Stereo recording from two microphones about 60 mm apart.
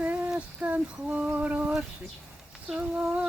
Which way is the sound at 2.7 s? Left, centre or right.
Centre.